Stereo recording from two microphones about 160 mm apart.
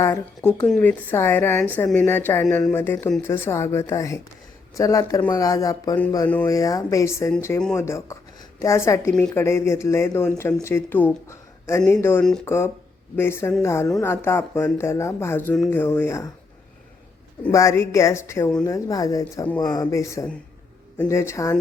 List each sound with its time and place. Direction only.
0.0 s speech: 20° left (ahead or behind)
6.2 s speech: 10° left (ahead or behind)
6.5 s speech: 20° left (ahead or behind)
17.5 s speech: 20° left (ahead or behind)